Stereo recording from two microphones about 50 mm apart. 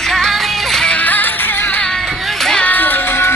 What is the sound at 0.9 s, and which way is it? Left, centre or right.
Music, left.